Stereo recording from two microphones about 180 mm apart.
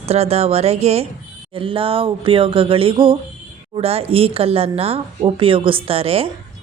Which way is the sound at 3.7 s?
35° right (ahead or behind).